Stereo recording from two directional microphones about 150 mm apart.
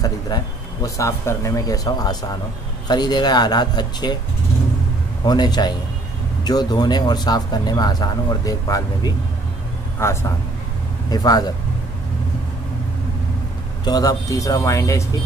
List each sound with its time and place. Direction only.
0.3 s speech: 25° left (ahead or behind)
5.2 s speech: 25° left (ahead or behind)
13.8 s speech: 25° left (ahead or behind)